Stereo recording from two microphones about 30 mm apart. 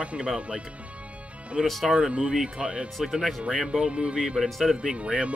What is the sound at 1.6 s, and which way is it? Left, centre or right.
Speech, centre.